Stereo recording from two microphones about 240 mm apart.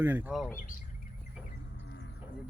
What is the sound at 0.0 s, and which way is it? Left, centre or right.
Speech, centre.